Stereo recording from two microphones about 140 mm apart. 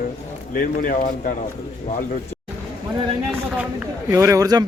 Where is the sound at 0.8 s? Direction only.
85° left.